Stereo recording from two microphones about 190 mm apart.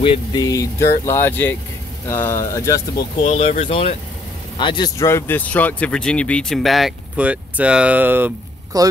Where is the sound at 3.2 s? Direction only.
35° left (ahead or behind).